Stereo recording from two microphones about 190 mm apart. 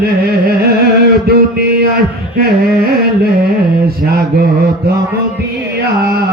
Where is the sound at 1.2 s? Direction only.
55° right (ahead or behind).